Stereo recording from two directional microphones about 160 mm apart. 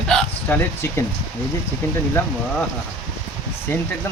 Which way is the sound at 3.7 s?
15° left (ahead or behind).